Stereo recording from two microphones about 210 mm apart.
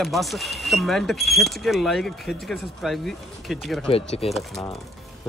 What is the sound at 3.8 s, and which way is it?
Speech, 25° left (ahead or behind).